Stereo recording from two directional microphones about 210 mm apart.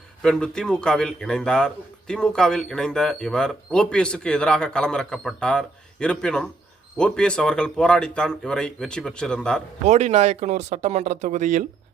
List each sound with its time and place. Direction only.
0.2 s a man's voice: 5° left (ahead or behind)
9.8 s speech: 30° right (ahead or behind)